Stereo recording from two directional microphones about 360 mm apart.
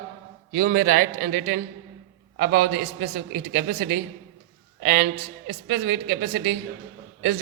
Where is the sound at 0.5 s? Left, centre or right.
Right.